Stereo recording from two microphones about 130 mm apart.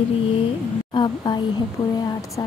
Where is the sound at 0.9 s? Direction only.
35° left (ahead or behind).